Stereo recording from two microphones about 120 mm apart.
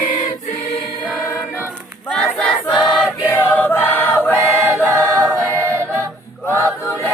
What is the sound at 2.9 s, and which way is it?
Choir, 5° right (ahead or behind).